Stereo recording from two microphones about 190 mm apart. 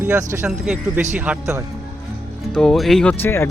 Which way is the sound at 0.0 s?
10° right (ahead or behind).